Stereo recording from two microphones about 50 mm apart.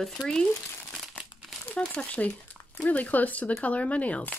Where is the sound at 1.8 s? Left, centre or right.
Left.